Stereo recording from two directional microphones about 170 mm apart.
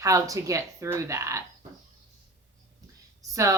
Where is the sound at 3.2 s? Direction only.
20° right (ahead or behind).